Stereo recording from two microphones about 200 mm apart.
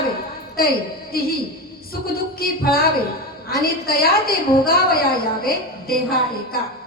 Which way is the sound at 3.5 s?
50° left (ahead or behind).